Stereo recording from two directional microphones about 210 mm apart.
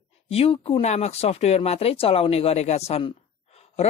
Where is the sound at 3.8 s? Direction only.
30° left (ahead or behind).